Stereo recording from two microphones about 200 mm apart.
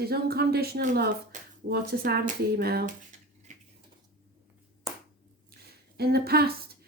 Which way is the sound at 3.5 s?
35° right (ahead or behind).